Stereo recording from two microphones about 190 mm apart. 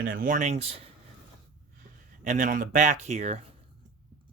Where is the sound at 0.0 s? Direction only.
50° right (ahead or behind).